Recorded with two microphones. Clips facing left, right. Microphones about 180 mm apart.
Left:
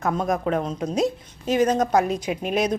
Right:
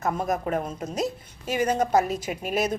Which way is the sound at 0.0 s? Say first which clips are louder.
Left 3 dB; 5° right (ahead or behind).